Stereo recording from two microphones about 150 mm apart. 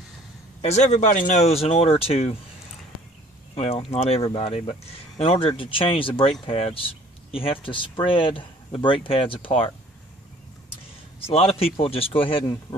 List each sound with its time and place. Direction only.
0.6 s speech: 45° left (ahead or behind)
3.5 s speech: 45° left (ahead or behind)
11.1 s speech: 40° left (ahead or behind)